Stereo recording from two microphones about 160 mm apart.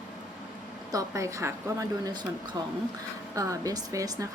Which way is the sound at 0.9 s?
20° right (ahead or behind).